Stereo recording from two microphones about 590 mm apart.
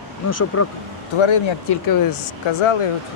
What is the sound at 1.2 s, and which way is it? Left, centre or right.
Speech, left.